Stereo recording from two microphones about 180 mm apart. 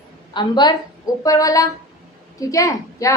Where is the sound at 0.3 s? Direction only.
25° left (ahead or behind).